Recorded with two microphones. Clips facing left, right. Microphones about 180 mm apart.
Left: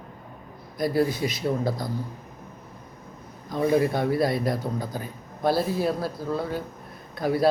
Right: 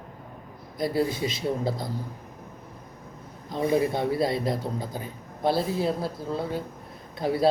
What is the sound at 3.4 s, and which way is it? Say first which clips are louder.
A man's voice: left 2 dB; 25° right (ahead or behind).